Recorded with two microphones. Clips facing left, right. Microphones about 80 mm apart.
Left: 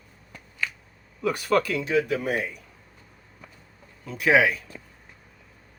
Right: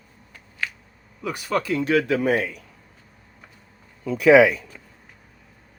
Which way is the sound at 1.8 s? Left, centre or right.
Right.